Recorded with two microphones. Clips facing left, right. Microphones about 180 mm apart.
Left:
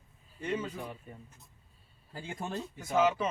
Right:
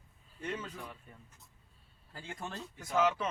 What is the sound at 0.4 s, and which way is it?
Speech, 5° left (ahead or behind).